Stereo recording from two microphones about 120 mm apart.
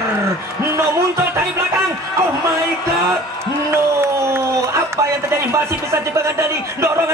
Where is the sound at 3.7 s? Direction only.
20° right (ahead or behind).